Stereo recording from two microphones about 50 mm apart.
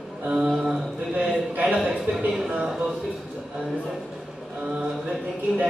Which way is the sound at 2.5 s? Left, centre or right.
Right.